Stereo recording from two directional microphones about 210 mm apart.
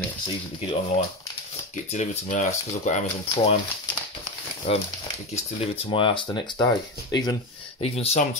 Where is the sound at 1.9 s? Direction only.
35° left (ahead or behind).